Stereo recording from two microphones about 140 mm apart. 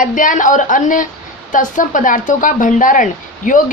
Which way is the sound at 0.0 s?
70° left (ahead or behind).